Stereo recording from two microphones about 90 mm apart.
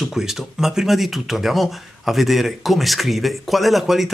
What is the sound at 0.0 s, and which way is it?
Speech, 5° right (ahead or behind).